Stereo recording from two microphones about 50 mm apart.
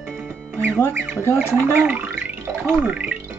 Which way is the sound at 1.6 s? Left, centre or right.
Right.